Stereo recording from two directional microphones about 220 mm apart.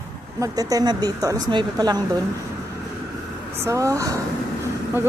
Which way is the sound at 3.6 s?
15° right (ahead or behind).